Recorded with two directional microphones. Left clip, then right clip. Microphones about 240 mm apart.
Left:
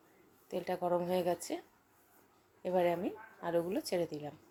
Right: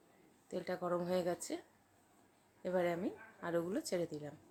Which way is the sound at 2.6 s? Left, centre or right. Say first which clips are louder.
Left 4 dB; centre.